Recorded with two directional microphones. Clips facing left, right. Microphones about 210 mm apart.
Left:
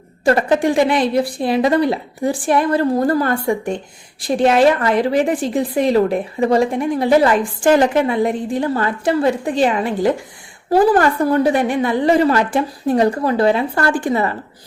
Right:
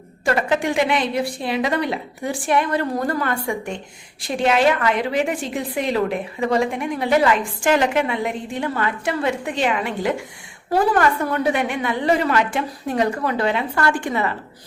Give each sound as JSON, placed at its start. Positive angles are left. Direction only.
{"t": 0.3, "sound": "a woman's voice", "side_deg": 35}